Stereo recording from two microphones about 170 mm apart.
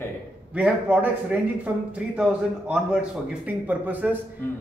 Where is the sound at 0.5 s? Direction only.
5° right (ahead or behind).